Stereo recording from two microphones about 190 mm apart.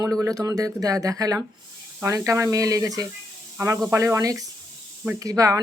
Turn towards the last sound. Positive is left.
turn(degrees=-20)  # may be behind; listen again after turning